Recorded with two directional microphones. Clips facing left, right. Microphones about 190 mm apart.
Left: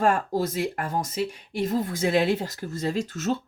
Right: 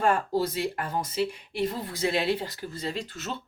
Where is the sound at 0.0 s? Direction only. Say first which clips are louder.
Left 2 dB; 50° left (ahead or behind).